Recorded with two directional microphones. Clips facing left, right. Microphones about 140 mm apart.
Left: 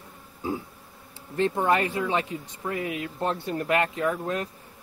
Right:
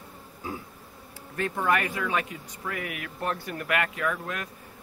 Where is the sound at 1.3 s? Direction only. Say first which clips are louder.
Left 3 dB; 25° left (ahead or behind).